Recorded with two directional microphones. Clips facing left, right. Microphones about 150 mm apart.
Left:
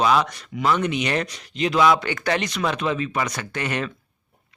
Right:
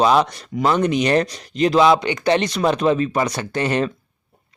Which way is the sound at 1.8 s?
20° right (ahead or behind).